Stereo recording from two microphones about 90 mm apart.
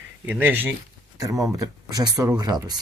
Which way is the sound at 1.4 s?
45° right (ahead or behind).